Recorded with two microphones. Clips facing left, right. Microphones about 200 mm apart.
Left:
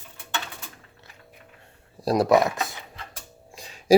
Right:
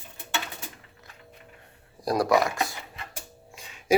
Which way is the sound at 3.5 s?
35° left (ahead or behind).